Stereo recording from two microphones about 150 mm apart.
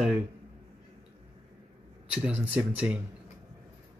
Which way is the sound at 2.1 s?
5° right (ahead or behind).